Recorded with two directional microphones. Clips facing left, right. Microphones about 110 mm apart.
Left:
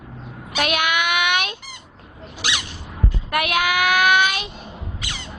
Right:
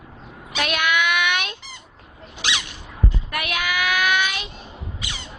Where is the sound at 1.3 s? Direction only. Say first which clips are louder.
Left 3 dB; 15° left (ahead or behind).